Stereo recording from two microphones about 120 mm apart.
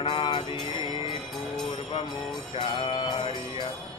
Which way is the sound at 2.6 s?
45° left (ahead or behind).